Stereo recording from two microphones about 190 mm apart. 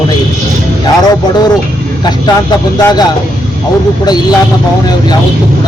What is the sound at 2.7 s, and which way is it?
Speech, 20° left (ahead or behind).